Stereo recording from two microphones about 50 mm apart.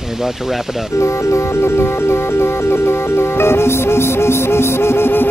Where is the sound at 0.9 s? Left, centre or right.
Left.